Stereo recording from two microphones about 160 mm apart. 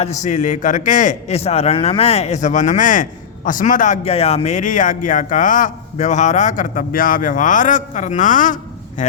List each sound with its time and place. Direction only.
0.0 s a man's voice: 45° left (ahead or behind)